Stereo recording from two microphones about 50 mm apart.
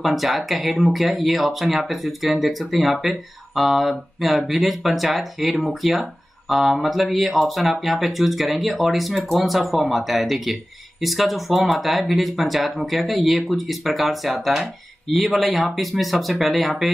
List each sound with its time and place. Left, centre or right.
0.0 s speech: centre